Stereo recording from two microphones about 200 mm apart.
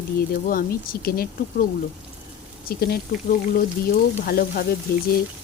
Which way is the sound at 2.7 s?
50° left (ahead or behind).